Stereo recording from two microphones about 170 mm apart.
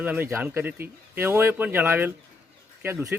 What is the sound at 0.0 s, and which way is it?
Speech, 10° right (ahead or behind).